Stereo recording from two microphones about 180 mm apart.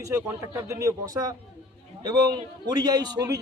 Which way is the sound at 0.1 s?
15° right (ahead or behind).